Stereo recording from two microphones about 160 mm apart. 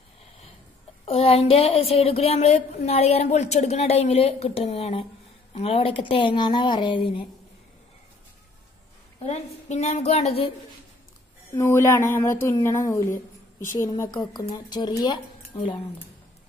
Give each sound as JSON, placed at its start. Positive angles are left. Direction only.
{"t": 1.0, "sound": "speech", "side_deg": 40}
{"t": 9.2, "sound": "a woman's voice", "side_deg": 45}
{"t": 11.5, "sound": "speech", "side_deg": 15}